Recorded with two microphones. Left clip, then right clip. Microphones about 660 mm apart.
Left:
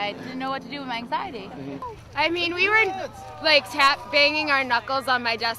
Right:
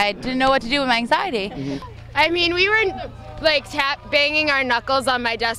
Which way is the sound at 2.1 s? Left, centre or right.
Right.